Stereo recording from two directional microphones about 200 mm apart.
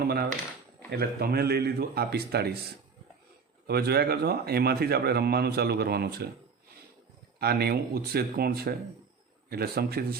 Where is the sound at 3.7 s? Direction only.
50° right (ahead or behind).